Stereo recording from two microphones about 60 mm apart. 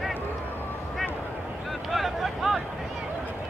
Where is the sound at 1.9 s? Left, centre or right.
Centre.